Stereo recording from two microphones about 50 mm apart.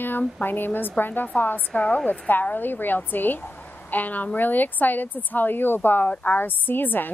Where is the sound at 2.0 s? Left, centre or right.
Left.